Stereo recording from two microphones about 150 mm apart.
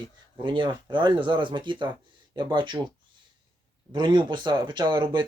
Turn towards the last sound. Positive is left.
turn(degrees=-30)  # may be behind; listen again after turning